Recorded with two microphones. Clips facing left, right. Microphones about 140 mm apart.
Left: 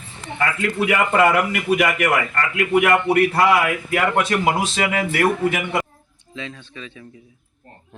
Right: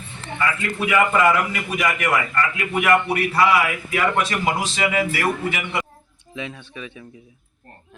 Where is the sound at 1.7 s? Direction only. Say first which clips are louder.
Left 4 dB; 55° left (ahead or behind).